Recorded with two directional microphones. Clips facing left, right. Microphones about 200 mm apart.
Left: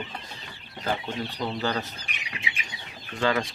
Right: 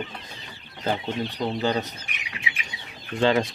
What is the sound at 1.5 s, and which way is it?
Speech, 20° right (ahead or behind).